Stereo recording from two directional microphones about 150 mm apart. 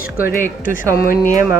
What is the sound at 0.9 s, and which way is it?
Speech, 75° left (ahead or behind).